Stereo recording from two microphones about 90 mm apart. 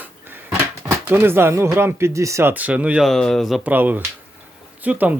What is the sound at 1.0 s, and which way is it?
Speech, 25° right (ahead or behind).